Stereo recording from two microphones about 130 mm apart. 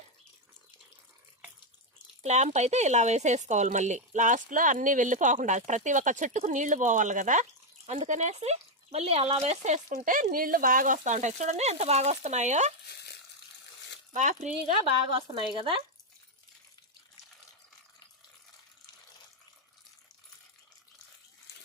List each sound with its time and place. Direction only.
2.2 s speech: 60° right (ahead or behind)
14.1 s speech: 70° right (ahead or behind)
15.0 s speech: 40° right (ahead or behind)